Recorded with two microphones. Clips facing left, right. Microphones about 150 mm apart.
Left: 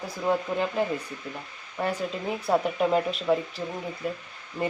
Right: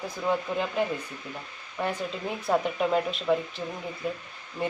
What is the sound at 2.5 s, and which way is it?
Speech, centre (ahead or behind).